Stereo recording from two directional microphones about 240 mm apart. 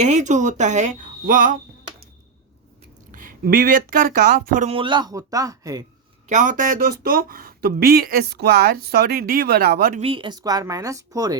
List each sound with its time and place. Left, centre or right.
0.0 s speech: right
3.1 s speech: right; by 5.8 s centre
6.2 s speech: right
10.0 s speech: right